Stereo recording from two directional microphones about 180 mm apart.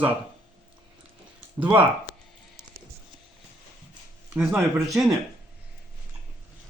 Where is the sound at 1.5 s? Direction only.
5° right (ahead or behind).